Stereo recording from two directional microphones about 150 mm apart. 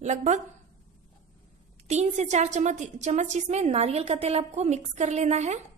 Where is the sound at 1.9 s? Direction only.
50° right (ahead or behind).